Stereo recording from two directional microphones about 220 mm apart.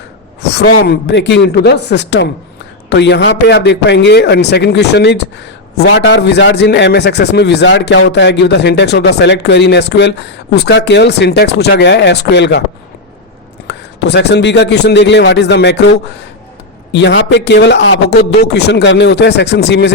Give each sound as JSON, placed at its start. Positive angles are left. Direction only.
{"t": 0.4, "sound": "a man's voice", "side_deg": 50}
{"t": 13.7, "sound": "a man's voice", "side_deg": 50}